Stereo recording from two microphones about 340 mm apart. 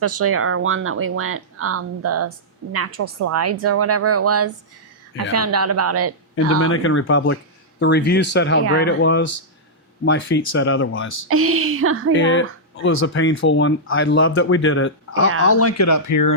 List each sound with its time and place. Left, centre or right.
0.0 s a woman's voice: right
6.6 s speech: left
11.3 s speech: right
12.1 s speech: left